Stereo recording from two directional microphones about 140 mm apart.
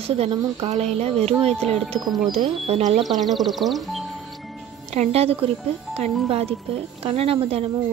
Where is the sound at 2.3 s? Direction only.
45° right (ahead or behind).